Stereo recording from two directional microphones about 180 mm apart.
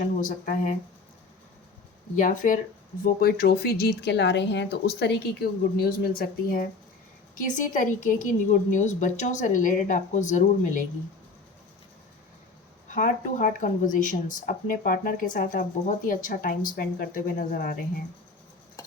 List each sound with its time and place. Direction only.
0.2 s a woman's voice: 45° left (ahead or behind)
2.1 s a woman's voice: 45° left (ahead or behind)
12.9 s a woman's voice: 45° left (ahead or behind)